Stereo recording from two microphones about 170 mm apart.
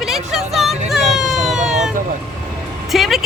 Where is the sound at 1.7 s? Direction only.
Centre (ahead or behind).